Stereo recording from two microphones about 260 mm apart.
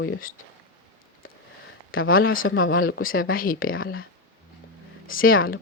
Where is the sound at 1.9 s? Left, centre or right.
Left.